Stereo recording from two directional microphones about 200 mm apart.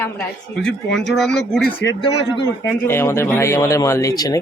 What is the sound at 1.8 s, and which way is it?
Speech, 25° left (ahead or behind).